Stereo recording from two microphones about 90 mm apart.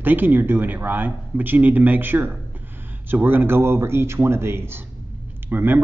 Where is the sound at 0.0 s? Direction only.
20° right (ahead or behind).